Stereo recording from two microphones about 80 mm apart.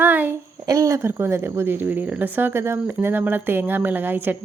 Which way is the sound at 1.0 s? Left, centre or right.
Right.